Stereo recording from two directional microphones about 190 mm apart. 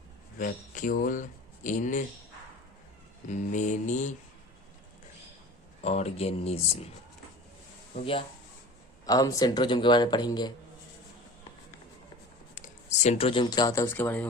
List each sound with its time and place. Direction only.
0.3 s speech: 45° left (ahead or behind)
3.2 s speech: 40° left (ahead or behind)
5.8 s speech: 35° left (ahead or behind)
9.0 s speech: 20° left (ahead or behind)
12.5 s speech: 40° left (ahead or behind); by 14.3 s 10° left (ahead or behind)